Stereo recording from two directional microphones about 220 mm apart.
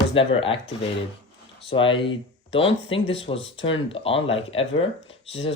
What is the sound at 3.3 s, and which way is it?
Speech, 60° left (ahead or behind).